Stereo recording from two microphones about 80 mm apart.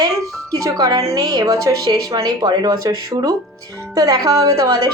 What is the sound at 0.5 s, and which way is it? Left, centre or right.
A woman's voice, right.